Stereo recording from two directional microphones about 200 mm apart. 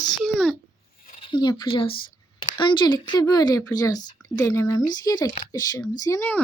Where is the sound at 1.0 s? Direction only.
30° left (ahead or behind).